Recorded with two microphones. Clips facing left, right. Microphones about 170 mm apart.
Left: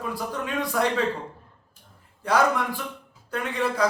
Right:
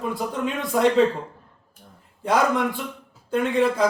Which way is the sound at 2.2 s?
25° right (ahead or behind).